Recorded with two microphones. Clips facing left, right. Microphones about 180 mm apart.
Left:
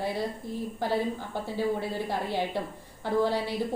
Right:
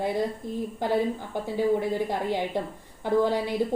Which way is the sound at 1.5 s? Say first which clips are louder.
Right 5 dB; 15° right (ahead or behind).